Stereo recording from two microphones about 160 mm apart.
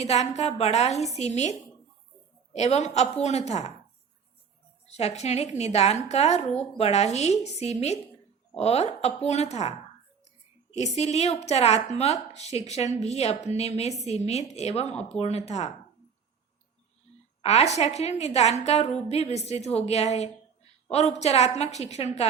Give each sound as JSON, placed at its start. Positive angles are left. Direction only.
{"t": 0.0, "sound": "a woman's voice", "side_deg": 45}
{"t": 4.9, "sound": "a woman's voice", "side_deg": 40}
{"t": 10.9, "sound": "a woman's voice", "side_deg": 45}
{"t": 17.4, "sound": "a woman's voice", "side_deg": 40}